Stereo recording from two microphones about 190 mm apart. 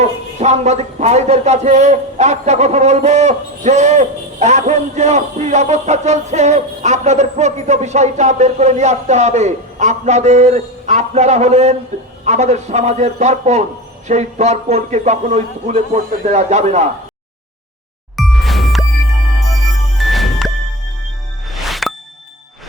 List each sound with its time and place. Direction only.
0.0 s a man's voice: 35° right (ahead or behind)
18.2 s ding: centre (ahead or behind)
20.0 s music: centre (ahead or behind)
21.5 s music: centre (ahead or behind)